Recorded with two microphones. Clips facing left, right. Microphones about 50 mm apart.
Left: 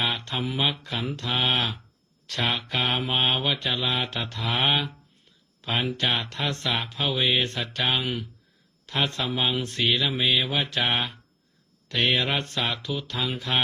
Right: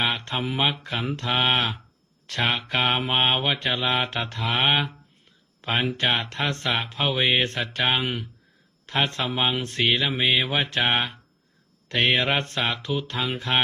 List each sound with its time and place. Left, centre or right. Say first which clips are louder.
0.0 s mantra: right 2 dB; right
4.7 s speech: right 2 dB; right
5.7 s mantra: right 2 dB; centre